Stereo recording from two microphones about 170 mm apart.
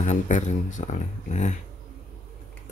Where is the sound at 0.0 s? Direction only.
45° left (ahead or behind).